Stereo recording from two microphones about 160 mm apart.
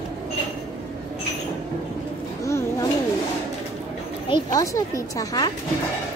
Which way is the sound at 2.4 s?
20° left (ahead or behind).